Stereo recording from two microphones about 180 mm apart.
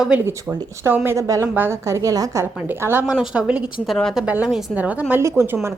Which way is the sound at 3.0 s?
5° right (ahead or behind).